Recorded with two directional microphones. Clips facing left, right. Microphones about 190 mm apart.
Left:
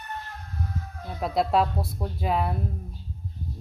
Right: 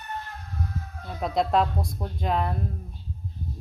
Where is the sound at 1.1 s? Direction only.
5° left (ahead or behind).